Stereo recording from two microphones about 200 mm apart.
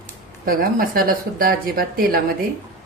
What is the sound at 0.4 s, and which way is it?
Speech, 45° right (ahead or behind).